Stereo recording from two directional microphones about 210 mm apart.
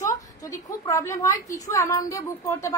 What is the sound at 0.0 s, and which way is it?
A woman's voice, 15° left (ahead or behind).